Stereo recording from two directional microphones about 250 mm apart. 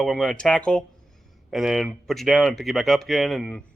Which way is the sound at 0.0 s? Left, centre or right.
Centre.